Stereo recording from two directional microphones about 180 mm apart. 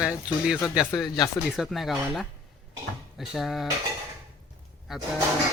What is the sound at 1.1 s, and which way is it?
Speech, 20° left (ahead or behind).